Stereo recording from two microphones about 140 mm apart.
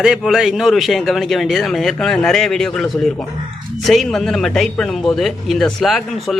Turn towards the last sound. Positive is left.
turn(degrees=0)  # may be behind; listen again after turning